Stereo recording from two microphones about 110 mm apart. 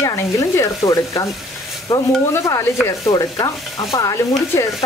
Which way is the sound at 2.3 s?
25° left (ahead or behind).